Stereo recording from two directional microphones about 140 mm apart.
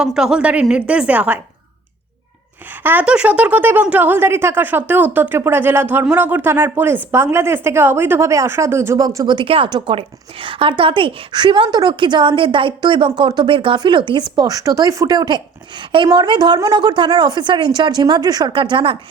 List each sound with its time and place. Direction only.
0.0 s a woman's voice: 5° right (ahead or behind)
2.8 s speech: 10° right (ahead or behind); by 18.9 s 35° right (ahead or behind)